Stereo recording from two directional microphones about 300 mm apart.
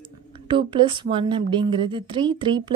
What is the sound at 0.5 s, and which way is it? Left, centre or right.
A woman's voice, centre.